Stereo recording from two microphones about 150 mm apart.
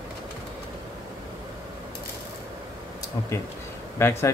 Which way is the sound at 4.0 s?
20° left (ahead or behind).